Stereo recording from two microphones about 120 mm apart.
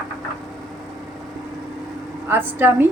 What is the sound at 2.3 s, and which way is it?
Speech, 20° right (ahead or behind).